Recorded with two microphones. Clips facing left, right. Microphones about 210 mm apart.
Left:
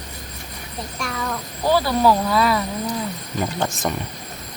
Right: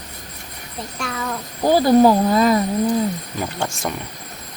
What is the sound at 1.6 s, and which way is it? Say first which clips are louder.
Speech: right 5 dB; 45° right (ahead or behind).